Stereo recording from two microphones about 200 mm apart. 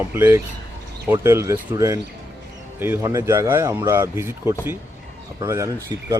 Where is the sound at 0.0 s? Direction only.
10° right (ahead or behind).